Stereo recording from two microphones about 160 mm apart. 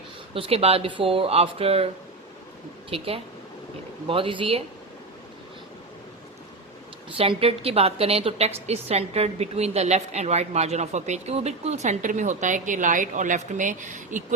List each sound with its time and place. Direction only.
0.3 s speech: 35° right (ahead or behind)
2.9 s speech: 35° right (ahead or behind)
4.1 s speech: 35° right (ahead or behind)
7.2 s a woman's voice: 35° right (ahead or behind); by 14.3 s 50° right (ahead or behind)